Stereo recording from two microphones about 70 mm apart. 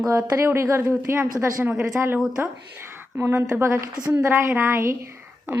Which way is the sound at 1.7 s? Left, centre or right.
Centre.